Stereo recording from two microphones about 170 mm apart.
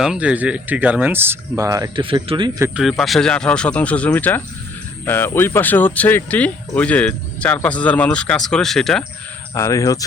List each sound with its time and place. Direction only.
0.0 s speech: 5° right (ahead or behind); by 2.5 s 30° right (ahead or behind)
3.0 s speech: 5° left (ahead or behind)
9.6 s speech: 20° left (ahead or behind)